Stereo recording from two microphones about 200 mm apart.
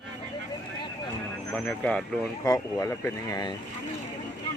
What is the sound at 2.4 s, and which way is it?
Speech, 15° left (ahead or behind).